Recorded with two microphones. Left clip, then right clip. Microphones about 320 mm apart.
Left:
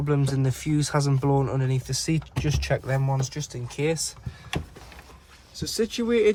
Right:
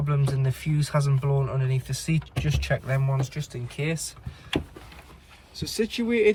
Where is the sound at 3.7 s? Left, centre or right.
Left.